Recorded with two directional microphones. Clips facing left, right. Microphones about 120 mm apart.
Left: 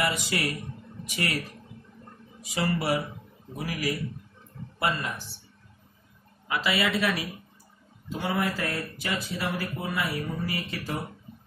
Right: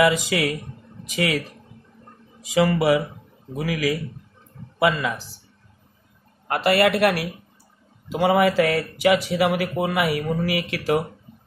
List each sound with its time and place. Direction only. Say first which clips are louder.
0.0 s speech: right 9 dB; 90° right
2.4 s speech: right 9 dB; 90° right
6.4 s speech: right 9 dB; 55° right (ahead or behind)
8.1 s speech: right 10 dB; 85° right